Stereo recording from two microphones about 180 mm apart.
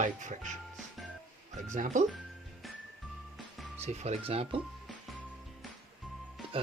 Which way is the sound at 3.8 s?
35° right (ahead or behind).